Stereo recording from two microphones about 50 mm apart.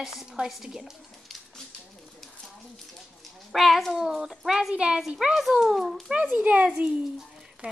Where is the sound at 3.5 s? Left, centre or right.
Centre.